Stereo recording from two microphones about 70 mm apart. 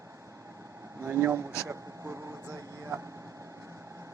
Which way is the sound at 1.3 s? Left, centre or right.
Right.